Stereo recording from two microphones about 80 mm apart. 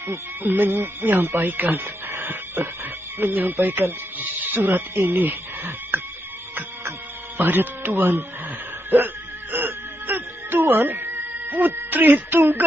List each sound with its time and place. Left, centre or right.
0.1 s speech: right
7.3 s speech: right
8.9 s music: right
12.4 s speech: right